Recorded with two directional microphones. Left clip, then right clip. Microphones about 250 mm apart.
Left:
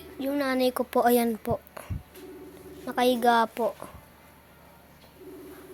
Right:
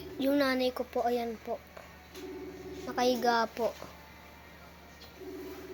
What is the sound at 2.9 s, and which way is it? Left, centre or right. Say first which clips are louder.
Speech: left 6 dB; left.